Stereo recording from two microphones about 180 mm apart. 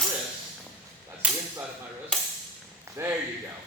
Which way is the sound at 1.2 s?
5° right (ahead or behind).